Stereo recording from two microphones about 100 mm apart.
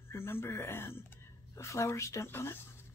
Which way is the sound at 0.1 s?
25° left (ahead or behind).